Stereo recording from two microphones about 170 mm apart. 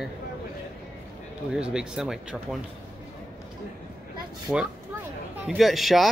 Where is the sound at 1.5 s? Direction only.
5° right (ahead or behind).